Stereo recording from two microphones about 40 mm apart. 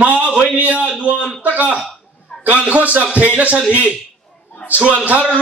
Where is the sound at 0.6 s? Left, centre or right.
Right.